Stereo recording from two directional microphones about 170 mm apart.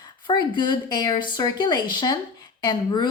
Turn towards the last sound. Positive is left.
turn(degrees=25)  # may be behind; listen again after turning